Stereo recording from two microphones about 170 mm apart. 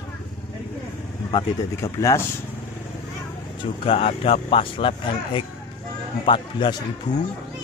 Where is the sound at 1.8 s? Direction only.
15° left (ahead or behind).